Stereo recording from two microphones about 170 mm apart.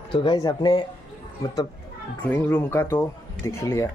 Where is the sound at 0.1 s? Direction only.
30° left (ahead or behind).